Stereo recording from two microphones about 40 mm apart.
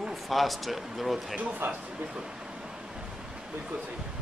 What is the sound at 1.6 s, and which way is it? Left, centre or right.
Speech, right.